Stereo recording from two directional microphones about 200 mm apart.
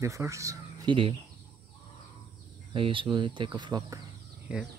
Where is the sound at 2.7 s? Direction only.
25° right (ahead or behind).